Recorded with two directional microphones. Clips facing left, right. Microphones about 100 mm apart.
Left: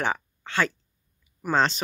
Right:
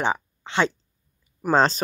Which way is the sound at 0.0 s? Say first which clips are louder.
Right 3 dB; 20° right (ahead or behind).